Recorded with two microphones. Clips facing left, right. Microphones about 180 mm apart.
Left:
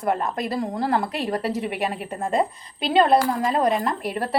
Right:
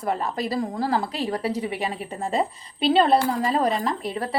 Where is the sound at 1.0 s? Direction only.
65° left (ahead or behind).